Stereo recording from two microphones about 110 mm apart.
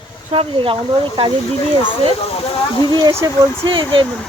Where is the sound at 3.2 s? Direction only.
40° right (ahead or behind).